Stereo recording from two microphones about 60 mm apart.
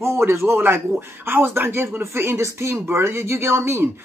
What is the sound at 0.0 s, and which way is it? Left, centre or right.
Speech, right.